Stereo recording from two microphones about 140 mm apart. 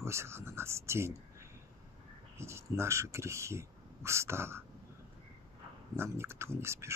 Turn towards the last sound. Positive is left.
turn(degrees=-20)  # may be behind; listen again after turning